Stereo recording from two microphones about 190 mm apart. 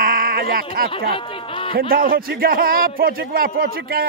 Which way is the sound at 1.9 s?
50° right (ahead or behind).